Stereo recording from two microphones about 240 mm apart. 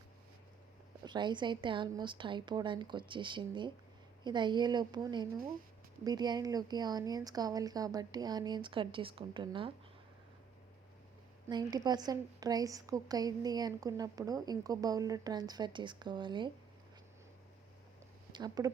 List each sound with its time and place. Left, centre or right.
1.0 s a woman's voice: centre
11.4 s a woman's voice: centre
18.3 s speech: centre